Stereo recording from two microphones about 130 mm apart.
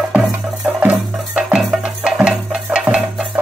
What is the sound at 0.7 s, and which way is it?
Music, 10° right (ahead or behind).